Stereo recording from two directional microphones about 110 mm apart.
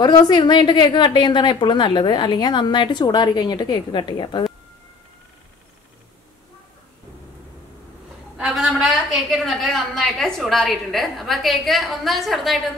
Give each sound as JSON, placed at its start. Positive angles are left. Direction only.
{"t": 0.0, "sound": "a woman's voice", "side_deg": 40}
{"t": 8.4, "sound": "a woman's voice", "side_deg": -5}